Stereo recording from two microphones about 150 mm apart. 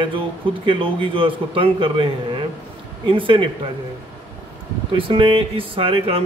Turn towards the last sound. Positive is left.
turn(degrees=-35)  # may be behind; listen again after turning